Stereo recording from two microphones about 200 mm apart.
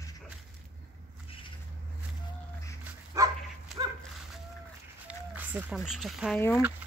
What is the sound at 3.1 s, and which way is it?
Dog, 15° right (ahead or behind).